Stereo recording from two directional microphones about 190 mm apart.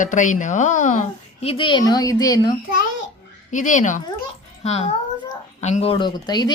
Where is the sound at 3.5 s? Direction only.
40° left (ahead or behind); by 6.5 s 20° left (ahead or behind).